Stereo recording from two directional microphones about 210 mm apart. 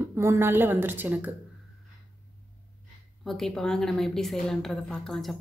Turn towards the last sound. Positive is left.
turn(degrees=0)  # may be behind; listen again after turning